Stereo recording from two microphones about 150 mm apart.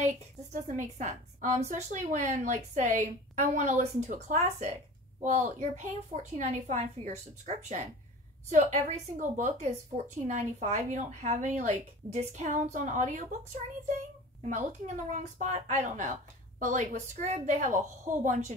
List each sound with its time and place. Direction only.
0.0 s a woman's voice: 55° right (ahead or behind)
14.5 s a woman's voice: 55° right (ahead or behind)